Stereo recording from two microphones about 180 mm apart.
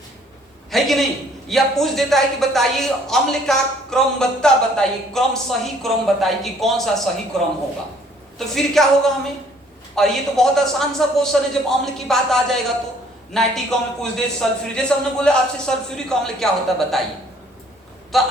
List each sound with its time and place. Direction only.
0.7 s a sound: centre (ahead or behind)
1.5 s speech: centre (ahead or behind)
18.1 s speech: centre (ahead or behind)